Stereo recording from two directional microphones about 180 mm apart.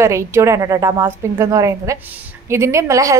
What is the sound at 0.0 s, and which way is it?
A woman's voice, 15° right (ahead or behind).